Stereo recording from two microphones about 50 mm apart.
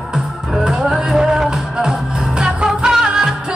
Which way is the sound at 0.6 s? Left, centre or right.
Centre.